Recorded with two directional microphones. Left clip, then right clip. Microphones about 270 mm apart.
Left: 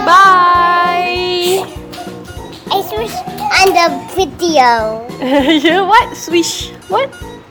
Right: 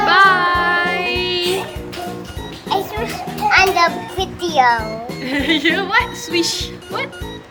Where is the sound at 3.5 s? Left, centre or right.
Left.